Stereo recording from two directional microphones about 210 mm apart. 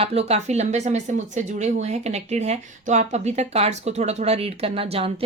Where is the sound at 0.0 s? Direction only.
30° right (ahead or behind).